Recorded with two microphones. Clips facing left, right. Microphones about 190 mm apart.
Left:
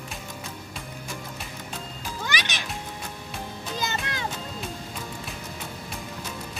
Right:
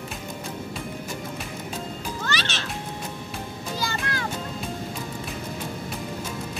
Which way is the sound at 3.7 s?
20° left (ahead or behind).